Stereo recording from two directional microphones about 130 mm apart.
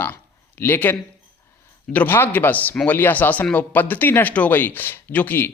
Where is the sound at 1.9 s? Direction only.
15° left (ahead or behind).